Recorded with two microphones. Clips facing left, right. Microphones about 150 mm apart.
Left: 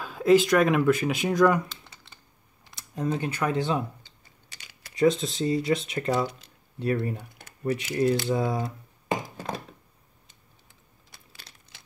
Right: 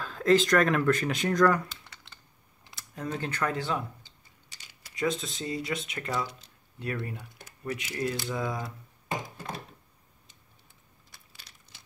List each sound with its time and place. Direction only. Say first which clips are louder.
0.0 s speech: left 4 dB; 10° left (ahead or behind)
2.7 s speech: left 6 dB; 20° left (ahead or behind)
4.5 s typing: left 4 dB; 70° left (ahead or behind)
4.9 s speech: left 8 dB; 30° left (ahead or behind)